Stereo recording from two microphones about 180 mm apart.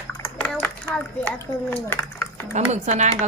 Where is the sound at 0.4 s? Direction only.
10° left (ahead or behind).